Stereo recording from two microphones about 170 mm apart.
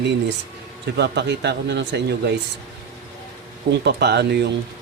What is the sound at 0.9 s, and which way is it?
A man's voice, 80° right.